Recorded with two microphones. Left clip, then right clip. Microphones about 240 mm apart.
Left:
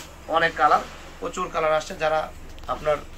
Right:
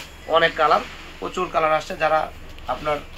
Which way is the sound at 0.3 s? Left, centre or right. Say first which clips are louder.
Right 2 dB; right.